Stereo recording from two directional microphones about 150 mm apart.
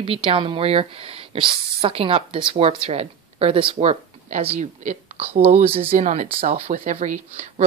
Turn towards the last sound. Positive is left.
turn(degrees=-55)  # may be behind; listen again after turning